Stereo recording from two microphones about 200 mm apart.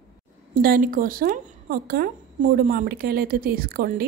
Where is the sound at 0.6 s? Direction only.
45° right (ahead or behind).